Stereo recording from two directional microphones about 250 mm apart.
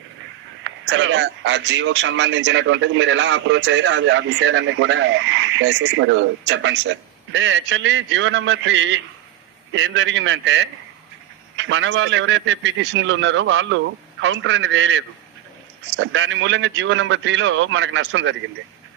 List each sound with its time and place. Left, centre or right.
0.6 s speech: right